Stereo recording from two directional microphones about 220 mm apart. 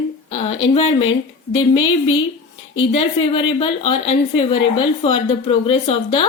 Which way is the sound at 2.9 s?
25° left (ahead or behind).